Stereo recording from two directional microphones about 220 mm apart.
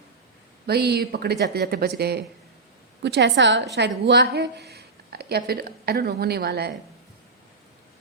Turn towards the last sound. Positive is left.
turn(degrees=-45)  # may be behind; listen again after turning